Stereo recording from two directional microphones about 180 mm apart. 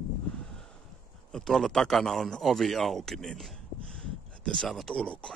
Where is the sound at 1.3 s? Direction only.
Centre (ahead or behind).